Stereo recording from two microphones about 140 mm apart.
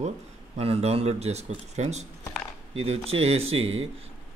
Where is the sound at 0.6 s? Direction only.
45° right (ahead or behind).